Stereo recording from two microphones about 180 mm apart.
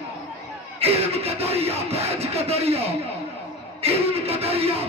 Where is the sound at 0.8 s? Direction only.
35° right (ahead or behind).